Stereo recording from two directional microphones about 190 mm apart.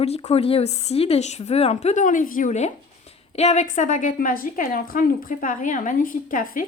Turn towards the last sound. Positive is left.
turn(degrees=45)  # may be behind; listen again after turning